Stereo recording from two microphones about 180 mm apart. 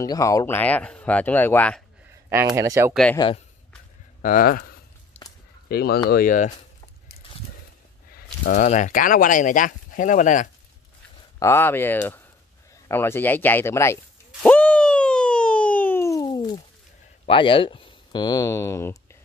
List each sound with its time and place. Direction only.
0.0 s speech: 20° left (ahead or behind)
2.2 s speech: 15° right (ahead or behind)
2.9 s speech: 5° left (ahead or behind)
4.2 s speech: 50° left (ahead or behind)
5.7 s speech: 60° left (ahead or behind)
8.5 s speech: 40° left (ahead or behind)
11.3 s speech: 15° left (ahead or behind)
14.4 s a sound: 10° left (ahead or behind)
17.3 s speech: 30° left (ahead or behind)